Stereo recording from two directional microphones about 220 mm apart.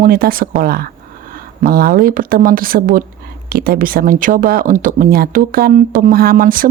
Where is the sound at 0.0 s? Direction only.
40° right (ahead or behind).